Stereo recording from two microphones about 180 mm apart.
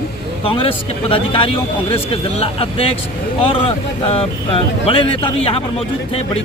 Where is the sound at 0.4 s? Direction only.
30° left (ahead or behind).